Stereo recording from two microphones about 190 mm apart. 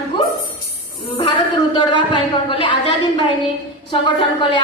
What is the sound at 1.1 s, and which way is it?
A woman's voice, 25° left (ahead or behind).